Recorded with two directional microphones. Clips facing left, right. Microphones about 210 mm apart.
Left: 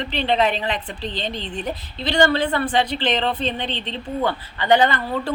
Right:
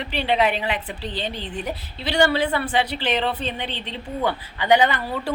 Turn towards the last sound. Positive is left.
turn(degrees=-10)  # may be behind; listen again after turning